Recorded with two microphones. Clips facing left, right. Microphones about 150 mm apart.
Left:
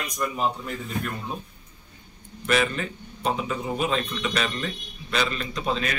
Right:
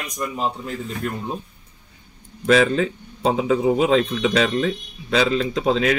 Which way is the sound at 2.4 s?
90° right.